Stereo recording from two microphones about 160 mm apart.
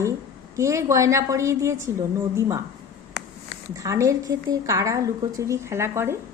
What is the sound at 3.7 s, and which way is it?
A woman's voice, 20° right (ahead or behind).